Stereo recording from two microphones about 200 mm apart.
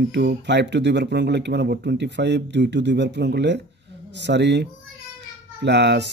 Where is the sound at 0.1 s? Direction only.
60° right (ahead or behind).